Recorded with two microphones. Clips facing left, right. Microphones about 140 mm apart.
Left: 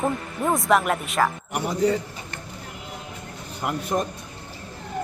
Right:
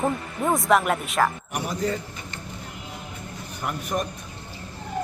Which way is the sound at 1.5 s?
20° left (ahead or behind).